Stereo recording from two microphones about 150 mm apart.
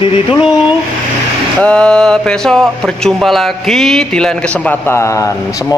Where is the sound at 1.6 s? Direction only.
5° left (ahead or behind).